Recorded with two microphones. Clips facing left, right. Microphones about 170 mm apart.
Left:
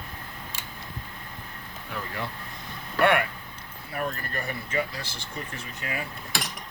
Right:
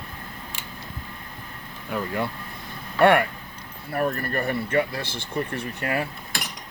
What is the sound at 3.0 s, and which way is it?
Speech, 50° right (ahead or behind).